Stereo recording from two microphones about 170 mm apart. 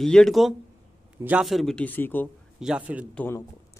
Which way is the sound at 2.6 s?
5° right (ahead or behind).